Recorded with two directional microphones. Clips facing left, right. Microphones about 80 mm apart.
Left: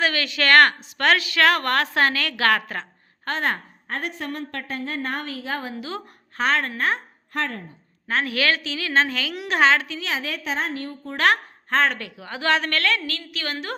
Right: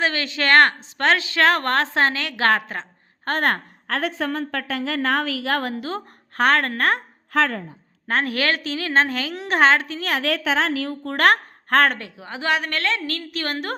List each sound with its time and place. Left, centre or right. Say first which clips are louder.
0.0 s a woman's voice: even; right
3.2 s a woman's voice: right 3 dB; right
3.9 s a woman's voice: right 5 dB; right
5.7 s a woman's voice: right 3 dB; right
8.0 s a woman's voice: right 1 dB; right
10.1 s a woman's voice: right 6 dB; right
11.2 s a woman's voice: right 3 dB; right
11.9 s a woman's voice: even; right
13.1 s a woman's voice: right 3 dB; right